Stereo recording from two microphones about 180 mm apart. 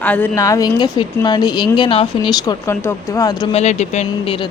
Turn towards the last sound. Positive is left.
turn(degrees=40)  # may be behind; listen again after turning